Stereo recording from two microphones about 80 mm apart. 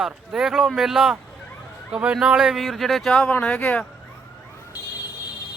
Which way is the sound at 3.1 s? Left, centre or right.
Centre.